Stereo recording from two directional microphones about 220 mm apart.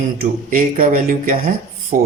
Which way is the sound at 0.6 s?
40° right (ahead or behind).